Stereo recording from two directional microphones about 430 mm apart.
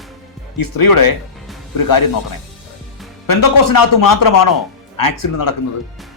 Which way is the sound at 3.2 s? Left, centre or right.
Left.